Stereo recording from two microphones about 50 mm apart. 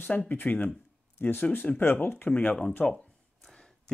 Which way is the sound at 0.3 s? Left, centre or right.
Left.